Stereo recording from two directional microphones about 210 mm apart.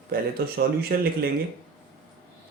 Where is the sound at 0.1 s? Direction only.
45° right (ahead or behind).